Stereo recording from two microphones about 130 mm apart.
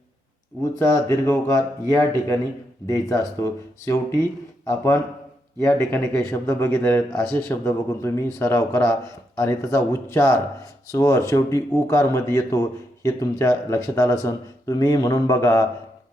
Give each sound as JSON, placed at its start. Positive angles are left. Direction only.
{"t": 0.6, "sound": "a man's voice", "side_deg": 20}